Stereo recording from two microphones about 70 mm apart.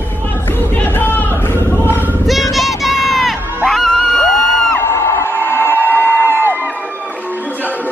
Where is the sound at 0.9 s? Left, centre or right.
Left.